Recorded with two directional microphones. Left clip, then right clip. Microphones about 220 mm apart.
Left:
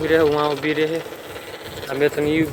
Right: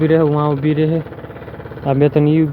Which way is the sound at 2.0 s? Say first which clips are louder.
Right 4 dB; 20° right (ahead or behind).